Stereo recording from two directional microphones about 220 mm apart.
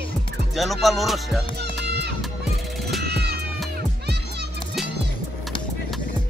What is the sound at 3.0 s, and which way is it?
Cat, 45° right (ahead or behind).